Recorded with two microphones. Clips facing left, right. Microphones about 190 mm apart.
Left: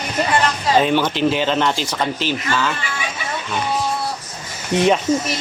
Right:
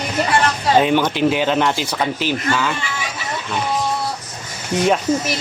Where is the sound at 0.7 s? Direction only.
15° right (ahead or behind).